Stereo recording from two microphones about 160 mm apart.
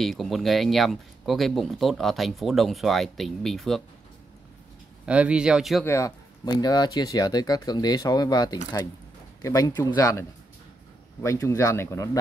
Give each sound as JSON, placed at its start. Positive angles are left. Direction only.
{"t": 0.0, "sound": "speech", "side_deg": 0}
{"t": 5.0, "sound": "speech", "side_deg": -5}
{"t": 5.9, "sound": "speech", "side_deg": 20}
{"t": 11.2, "sound": "speech", "side_deg": 20}